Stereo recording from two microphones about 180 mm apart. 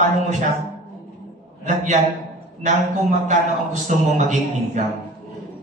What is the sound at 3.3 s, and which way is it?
A man's voice, 45° right (ahead or behind).